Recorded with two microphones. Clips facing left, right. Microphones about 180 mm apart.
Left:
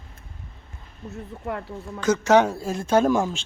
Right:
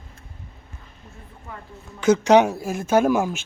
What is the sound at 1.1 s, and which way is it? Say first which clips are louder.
Speech: left 10 dB; 70° left (ahead or behind).